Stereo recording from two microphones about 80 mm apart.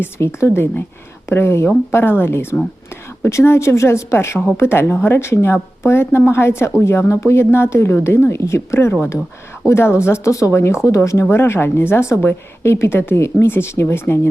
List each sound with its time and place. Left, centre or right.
0.0 s a woman's voice: left